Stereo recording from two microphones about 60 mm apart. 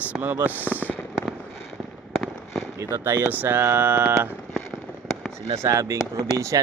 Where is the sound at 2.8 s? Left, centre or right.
Right.